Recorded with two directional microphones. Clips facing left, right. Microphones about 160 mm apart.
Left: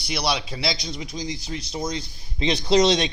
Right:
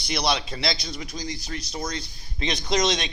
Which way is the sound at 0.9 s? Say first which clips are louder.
Left 2 dB; 20° left (ahead or behind).